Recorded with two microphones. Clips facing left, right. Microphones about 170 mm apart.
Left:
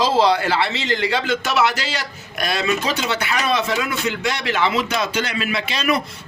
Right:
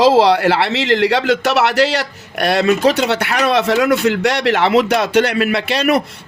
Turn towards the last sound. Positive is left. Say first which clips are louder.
# right 6 dB
turn(degrees=-65)  # may be behind; listen again after turning